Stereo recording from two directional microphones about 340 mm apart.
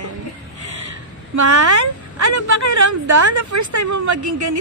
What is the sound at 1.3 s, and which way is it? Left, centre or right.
A woman's voice, right.